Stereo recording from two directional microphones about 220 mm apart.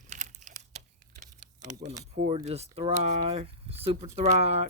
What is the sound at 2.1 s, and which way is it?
Speech, 30° right (ahead or behind).